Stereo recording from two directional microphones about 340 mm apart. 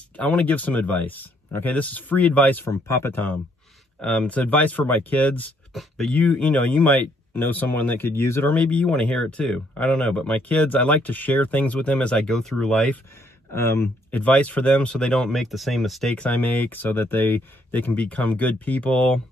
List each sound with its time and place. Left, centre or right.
0.2 s speech: centre